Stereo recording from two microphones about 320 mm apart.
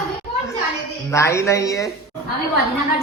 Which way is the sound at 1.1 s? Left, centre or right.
Centre.